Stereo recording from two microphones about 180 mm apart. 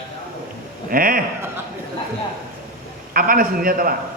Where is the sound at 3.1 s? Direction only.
50° right (ahead or behind).